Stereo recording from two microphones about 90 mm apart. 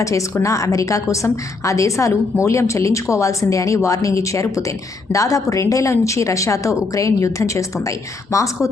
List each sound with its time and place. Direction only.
0.0 s a woman's voice: 35° left (ahead or behind)